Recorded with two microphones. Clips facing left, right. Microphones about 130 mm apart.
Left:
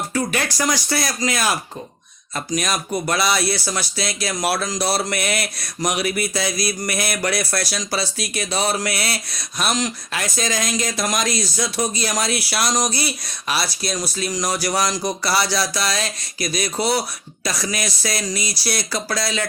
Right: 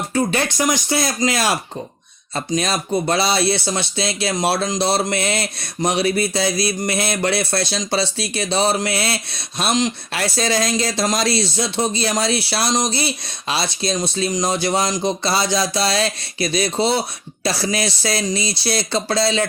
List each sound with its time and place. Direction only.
0.1 s speech: 25° right (ahead or behind)